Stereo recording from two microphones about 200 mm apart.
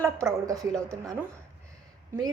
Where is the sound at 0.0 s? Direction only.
15° right (ahead or behind).